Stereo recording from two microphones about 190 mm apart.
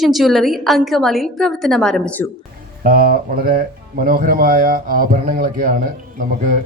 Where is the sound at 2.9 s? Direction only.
50° right (ahead or behind).